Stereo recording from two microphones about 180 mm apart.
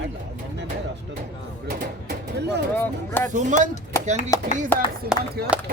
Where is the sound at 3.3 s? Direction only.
45° right (ahead or behind).